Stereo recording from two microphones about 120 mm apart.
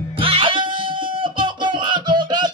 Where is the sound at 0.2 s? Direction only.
50° right (ahead or behind).